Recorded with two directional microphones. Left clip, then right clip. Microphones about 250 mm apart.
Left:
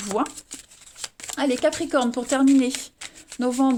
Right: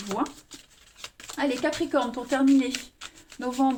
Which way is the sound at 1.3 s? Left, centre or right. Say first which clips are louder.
Left 4 dB; left.